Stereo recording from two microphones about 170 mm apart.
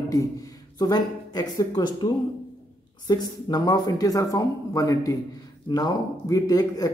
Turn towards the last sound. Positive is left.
turn(degrees=20)  # may be behind; listen again after turning